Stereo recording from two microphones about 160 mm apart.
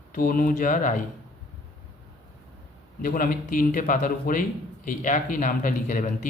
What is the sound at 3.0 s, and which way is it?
A man's voice, 55° left (ahead or behind).